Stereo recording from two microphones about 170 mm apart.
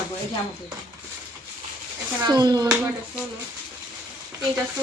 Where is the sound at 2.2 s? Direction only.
25° right (ahead or behind).